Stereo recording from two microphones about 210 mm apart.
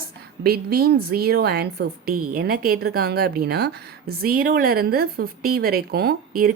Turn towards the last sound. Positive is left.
turn(degrees=-45)  # may be behind; listen again after turning